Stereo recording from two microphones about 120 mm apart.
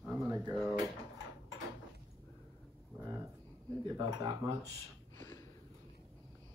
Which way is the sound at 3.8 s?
30° right (ahead or behind).